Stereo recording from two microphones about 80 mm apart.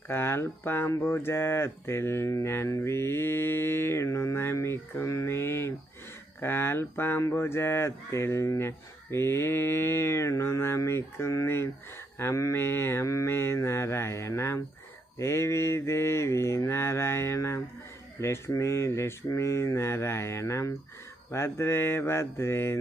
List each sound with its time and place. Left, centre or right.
0.1 s speech: left